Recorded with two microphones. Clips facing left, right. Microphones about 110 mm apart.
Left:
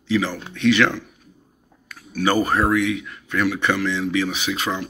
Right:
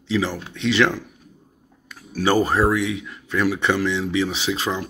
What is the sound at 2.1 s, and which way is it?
Speech, 30° right (ahead or behind).